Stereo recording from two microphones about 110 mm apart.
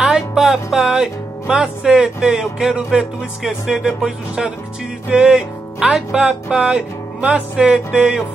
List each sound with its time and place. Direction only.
0.0 s music: 5° right (ahead or behind)
5.1 s speech: 5° right (ahead or behind)